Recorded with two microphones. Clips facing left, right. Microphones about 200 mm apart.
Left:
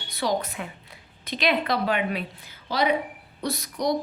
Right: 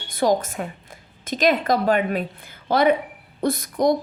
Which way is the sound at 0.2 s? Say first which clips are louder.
Right 6 dB; 45° right (ahead or behind).